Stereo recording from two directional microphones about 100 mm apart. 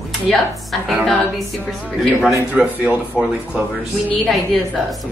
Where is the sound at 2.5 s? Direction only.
15° right (ahead or behind).